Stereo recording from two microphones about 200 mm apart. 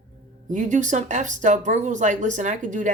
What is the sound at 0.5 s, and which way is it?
Speech, 40° right (ahead or behind).